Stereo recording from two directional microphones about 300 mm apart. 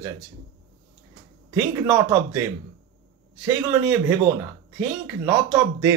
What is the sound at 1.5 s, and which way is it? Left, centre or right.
Speech, centre.